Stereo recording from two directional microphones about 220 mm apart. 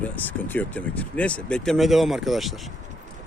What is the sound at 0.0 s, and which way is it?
Speech, 10° left (ahead or behind).